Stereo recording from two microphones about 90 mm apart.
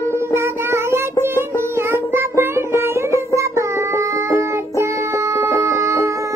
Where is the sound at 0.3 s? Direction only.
30° right (ahead or behind).